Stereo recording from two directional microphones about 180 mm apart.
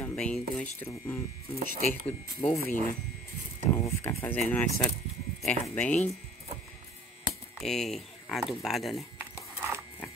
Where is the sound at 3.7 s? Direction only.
15° left (ahead or behind).